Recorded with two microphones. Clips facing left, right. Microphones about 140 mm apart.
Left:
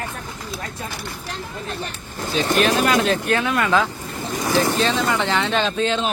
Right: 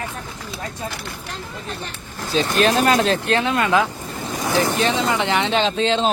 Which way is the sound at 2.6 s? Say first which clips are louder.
Right 2 dB; 40° right (ahead or behind).